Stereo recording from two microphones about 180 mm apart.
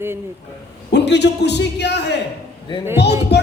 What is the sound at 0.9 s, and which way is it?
Speech, 70° left (ahead or behind).